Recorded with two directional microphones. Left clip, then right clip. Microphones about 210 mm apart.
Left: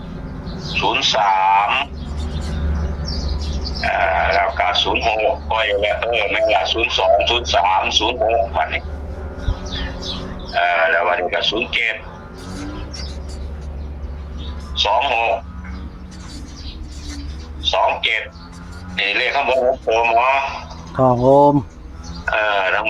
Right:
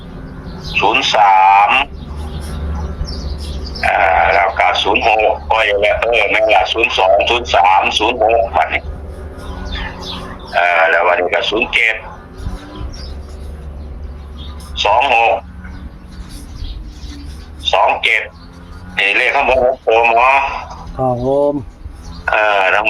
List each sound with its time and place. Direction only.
0.7 s speech: 30° right (ahead or behind)
3.8 s speech: 30° right (ahead or behind)
14.8 s speech: 25° right (ahead or behind)
17.6 s speech: 30° right (ahead or behind)
20.9 s speech: 45° left (ahead or behind)
22.3 s speech: 30° right (ahead or behind)